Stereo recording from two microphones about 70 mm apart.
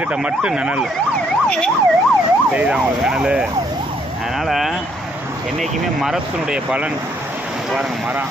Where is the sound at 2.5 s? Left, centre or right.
Centre.